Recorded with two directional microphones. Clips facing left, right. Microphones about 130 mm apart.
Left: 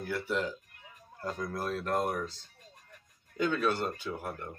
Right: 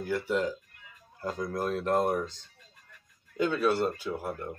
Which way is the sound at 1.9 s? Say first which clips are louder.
Right 5 dB; 30° right (ahead or behind).